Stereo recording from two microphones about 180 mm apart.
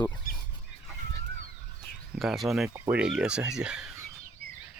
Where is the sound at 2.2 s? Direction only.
Centre (ahead or behind).